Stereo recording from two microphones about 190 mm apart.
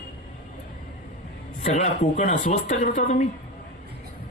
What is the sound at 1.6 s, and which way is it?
A man's voice, 40° left (ahead or behind).